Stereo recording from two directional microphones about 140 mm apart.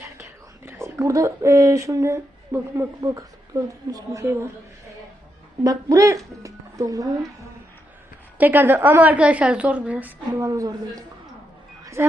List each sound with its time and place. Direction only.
0.2 s speech: 20° right (ahead or behind)
5.6 s a woman's voice: 25° right (ahead or behind)
8.4 s a woman's voice: 15° right (ahead or behind)
10.4 s a woman's voice: 25° right (ahead or behind)